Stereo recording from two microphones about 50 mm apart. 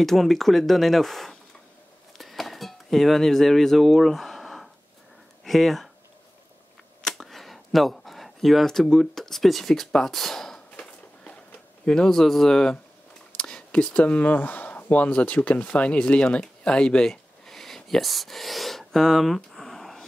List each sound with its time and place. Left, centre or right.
0.0 s speech: centre
2.1 s music: centre
5.4 s speech: centre
7.1 s speech: centre
11.8 s speech: centre